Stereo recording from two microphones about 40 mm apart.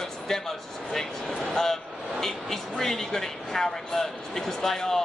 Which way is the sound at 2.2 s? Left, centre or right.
Centre.